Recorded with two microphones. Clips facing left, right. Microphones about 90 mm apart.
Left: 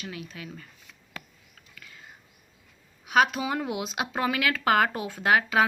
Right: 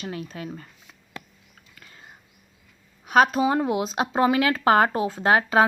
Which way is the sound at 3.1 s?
40° right (ahead or behind).